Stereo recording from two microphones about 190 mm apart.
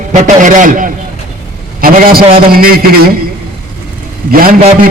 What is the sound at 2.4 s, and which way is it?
Speech, 50° right (ahead or behind).